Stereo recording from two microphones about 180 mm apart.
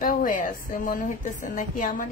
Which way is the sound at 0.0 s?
50° left (ahead or behind).